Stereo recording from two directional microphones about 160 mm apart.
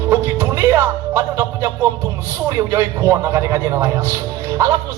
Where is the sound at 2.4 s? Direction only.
20° right (ahead or behind).